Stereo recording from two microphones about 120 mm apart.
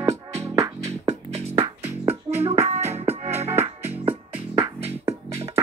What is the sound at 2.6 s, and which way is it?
Music, 65° right (ahead or behind).